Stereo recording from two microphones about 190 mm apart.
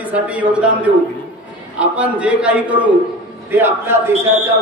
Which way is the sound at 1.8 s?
5° right (ahead or behind).